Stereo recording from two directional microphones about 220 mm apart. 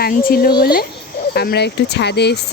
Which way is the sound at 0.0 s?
45° left (ahead or behind).